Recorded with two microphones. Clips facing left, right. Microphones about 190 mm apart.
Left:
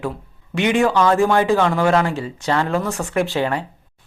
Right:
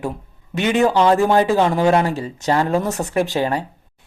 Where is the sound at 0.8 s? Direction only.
20° right (ahead or behind).